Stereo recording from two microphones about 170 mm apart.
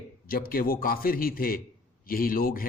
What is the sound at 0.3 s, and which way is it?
A man's voice, 60° left (ahead or behind).